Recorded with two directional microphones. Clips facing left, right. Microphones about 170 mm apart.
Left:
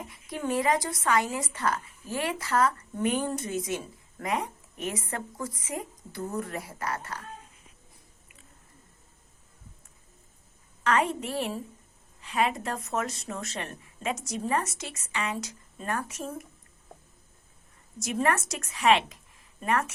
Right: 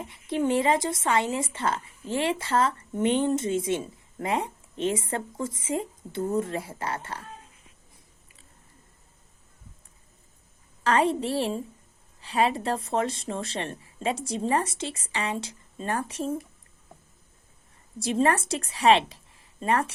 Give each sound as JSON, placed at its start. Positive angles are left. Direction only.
{"t": 0.0, "sound": "speech", "side_deg": -25}
{"t": 10.8, "sound": "speech", "side_deg": -30}
{"t": 18.0, "sound": "a woman's voice", "side_deg": -30}